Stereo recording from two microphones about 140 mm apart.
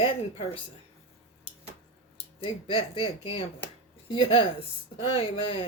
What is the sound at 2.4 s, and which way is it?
Speech, 40° left (ahead or behind).